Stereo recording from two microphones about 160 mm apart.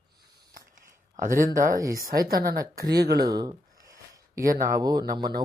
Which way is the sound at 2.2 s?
70° right (ahead or behind).